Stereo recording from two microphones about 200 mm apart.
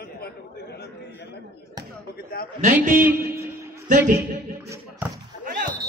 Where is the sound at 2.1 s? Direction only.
50° left (ahead or behind).